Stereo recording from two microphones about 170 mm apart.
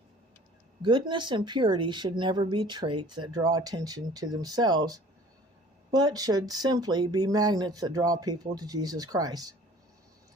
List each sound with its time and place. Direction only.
0.8 s speech: 25° right (ahead or behind)